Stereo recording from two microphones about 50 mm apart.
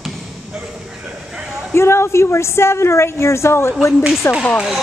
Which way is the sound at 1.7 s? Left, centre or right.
Left.